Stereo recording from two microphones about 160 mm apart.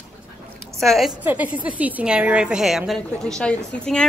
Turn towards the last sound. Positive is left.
turn(degrees=5)  # may be behind; listen again after turning